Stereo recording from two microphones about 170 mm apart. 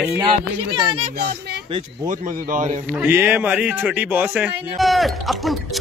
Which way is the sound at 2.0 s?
50° right (ahead or behind).